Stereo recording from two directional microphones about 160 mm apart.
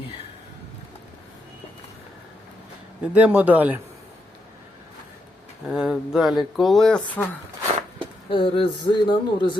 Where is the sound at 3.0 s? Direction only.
10° right (ahead or behind).